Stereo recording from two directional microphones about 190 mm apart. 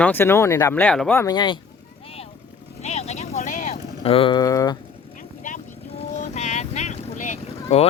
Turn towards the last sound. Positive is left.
turn(degrees=35)  # may be behind; listen again after turning